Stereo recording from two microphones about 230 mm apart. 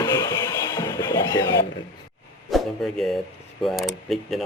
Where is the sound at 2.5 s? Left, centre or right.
Centre.